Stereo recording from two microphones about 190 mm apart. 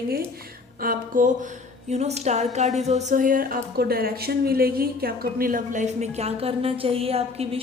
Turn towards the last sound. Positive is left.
turn(degrees=-30)  # may be behind; listen again after turning